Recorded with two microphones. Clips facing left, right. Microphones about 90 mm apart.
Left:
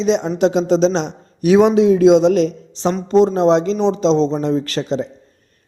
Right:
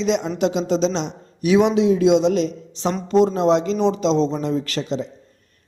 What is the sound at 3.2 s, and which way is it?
A man's voice, 30° left (ahead or behind).